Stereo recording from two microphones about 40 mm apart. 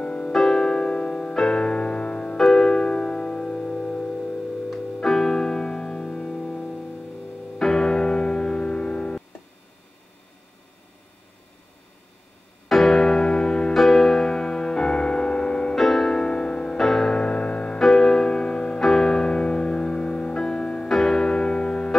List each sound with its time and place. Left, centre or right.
0.0 s music: left
0.3 s music: centre; by 1.3 s left
1.3 s music: centre
2.3 s music: centre
12.6 s music: centre; by 13.7 s left
13.7 s music: centre; by 15.7 s left
15.7 s music: centre
16.2 s music: left
16.7 s music: centre
17.2 s music: left
17.7 s music: centre
20.9 s music: centre